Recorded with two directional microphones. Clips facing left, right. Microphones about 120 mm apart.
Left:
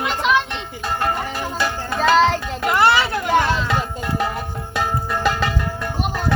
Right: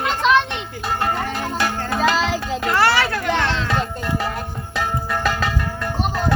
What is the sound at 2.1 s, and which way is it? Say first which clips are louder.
Child singing: left 5 dB; 5° right (ahead or behind).